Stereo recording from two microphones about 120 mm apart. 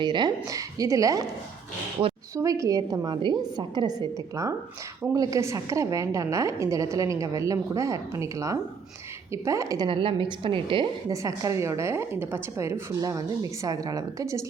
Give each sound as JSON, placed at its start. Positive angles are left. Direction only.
{"t": 0.0, "sound": "a woman's voice", "side_deg": -40}
{"t": 2.0, "sound": "a woman's voice", "side_deg": -45}
{"t": 2.3, "sound": "a woman's voice", "side_deg": -25}
{"t": 3.2, "sound": "a woman's voice", "side_deg": -40}
{"t": 11.1, "sound": "a woman's voice", "side_deg": -25}